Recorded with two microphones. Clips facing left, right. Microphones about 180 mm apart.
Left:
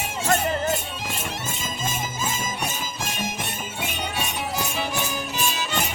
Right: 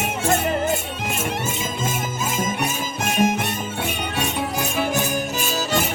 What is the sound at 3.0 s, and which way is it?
Music, 60° right (ahead or behind).